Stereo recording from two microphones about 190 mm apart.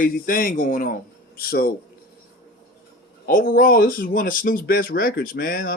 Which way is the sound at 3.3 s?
45° left (ahead or behind).